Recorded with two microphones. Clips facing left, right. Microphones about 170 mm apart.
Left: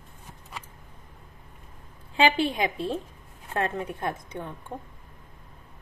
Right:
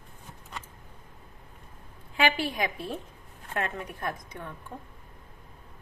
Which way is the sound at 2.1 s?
25° left (ahead or behind).